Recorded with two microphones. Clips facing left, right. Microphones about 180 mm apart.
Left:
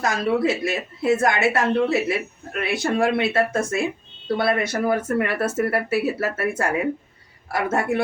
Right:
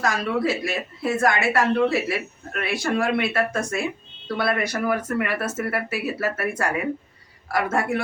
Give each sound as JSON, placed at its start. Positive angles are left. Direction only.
{"t": 0.0, "sound": "speech", "side_deg": 20}